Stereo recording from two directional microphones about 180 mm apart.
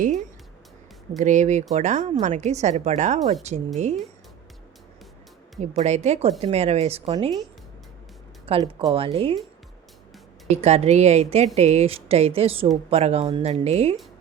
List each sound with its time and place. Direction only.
1.1 s speech: 45° right (ahead or behind)
5.5 s speech: 40° right (ahead or behind)
8.4 s speech: 30° right (ahead or behind)
10.6 s speech: 35° right (ahead or behind)